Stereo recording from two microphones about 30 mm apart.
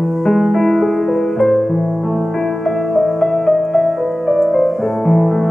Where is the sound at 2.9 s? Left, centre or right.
Centre.